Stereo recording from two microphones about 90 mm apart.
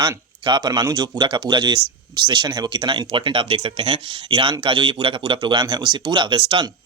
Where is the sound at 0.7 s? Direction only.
45° right (ahead or behind).